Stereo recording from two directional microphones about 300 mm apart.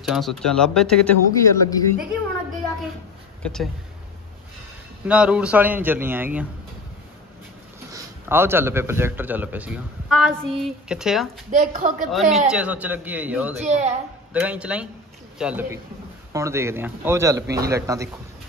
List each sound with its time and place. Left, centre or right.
0.0 s a man's voice: centre
3.4 s a man's voice: centre
5.0 s a man's voice: centre
7.9 s a man's voice: centre
11.5 s a woman's voice: right
12.1 s a man's voice: centre
13.7 s a woman's voice: right
14.3 s a man's voice: centre